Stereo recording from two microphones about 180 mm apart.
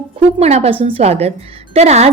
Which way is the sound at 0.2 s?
35° right (ahead or behind).